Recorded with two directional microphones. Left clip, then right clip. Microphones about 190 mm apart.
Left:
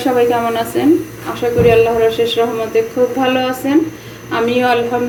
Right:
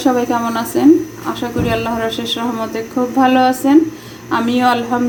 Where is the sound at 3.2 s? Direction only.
45° right (ahead or behind).